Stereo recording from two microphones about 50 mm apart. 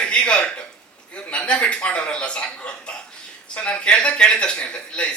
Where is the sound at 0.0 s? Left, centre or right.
Centre.